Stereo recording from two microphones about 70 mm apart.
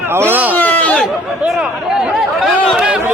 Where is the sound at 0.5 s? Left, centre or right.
Left.